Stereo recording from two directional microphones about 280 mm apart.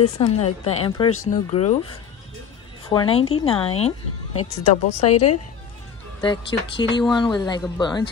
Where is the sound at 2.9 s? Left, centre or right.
Centre.